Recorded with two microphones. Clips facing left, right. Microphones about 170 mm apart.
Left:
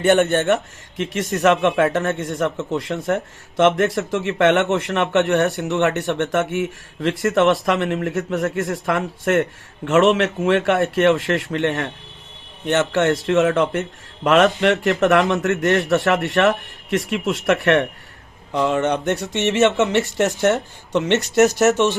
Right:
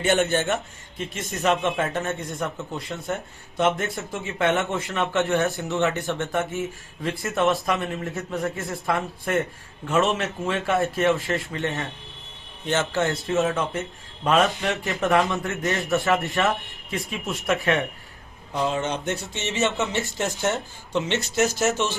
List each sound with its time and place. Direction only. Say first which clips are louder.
0.0 s a man's voice: left 6 dB; 60° left (ahead or behind)